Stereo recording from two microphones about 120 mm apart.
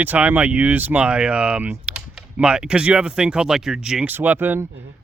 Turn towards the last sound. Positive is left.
turn(degrees=-15)  # may be behind; listen again after turning